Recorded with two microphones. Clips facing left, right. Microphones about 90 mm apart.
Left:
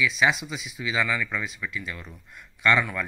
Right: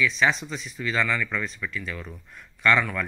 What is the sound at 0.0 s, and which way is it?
Speech, 10° left (ahead or behind).